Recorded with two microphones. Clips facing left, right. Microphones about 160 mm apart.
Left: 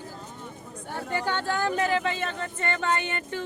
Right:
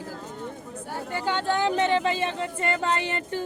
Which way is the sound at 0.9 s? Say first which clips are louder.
Right 1 dB; 10° right (ahead or behind).